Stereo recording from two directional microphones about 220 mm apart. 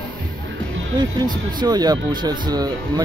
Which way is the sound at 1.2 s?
20° right (ahead or behind).